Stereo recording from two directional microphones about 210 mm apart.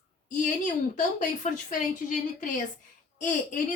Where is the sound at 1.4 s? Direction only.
35° left (ahead or behind).